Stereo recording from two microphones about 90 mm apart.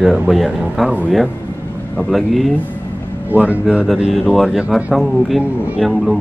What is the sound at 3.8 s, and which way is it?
A man's voice, centre (ahead or behind).